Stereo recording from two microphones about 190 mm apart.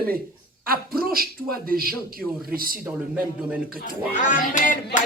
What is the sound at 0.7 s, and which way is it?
Speech, 50° right (ahead or behind).